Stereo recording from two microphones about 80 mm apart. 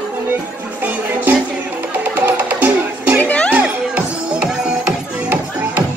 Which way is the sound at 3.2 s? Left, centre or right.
Centre.